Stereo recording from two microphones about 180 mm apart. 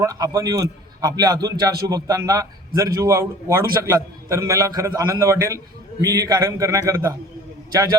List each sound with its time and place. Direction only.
0.0 s a man's voice: 15° right (ahead or behind)